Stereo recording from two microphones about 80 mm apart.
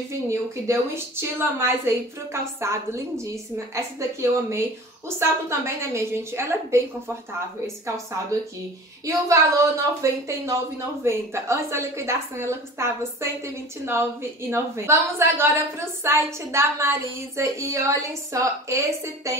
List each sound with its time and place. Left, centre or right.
0.3 s a woman's voice: right
14.5 s a woman's voice: right